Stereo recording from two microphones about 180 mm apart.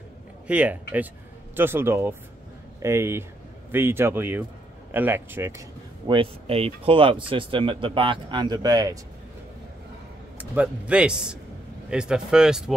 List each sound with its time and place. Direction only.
0.5 s speech: 10° right (ahead or behind)
6.0 s speech: 30° right (ahead or behind)
10.3 s speech: 10° right (ahead or behind)